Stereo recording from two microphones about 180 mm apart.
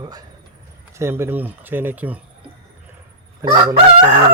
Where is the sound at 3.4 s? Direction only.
15° right (ahead or behind).